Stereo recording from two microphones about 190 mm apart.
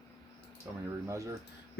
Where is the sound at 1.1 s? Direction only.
15° right (ahead or behind).